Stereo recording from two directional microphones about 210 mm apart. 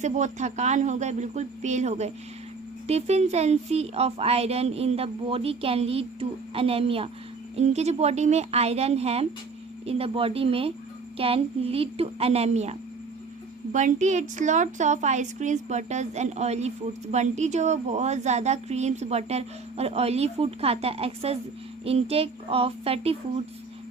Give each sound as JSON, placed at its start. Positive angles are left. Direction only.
{"t": 0.0, "sound": "a woman's voice", "side_deg": -35}
{"t": 13.7, "sound": "a woman's voice", "side_deg": -35}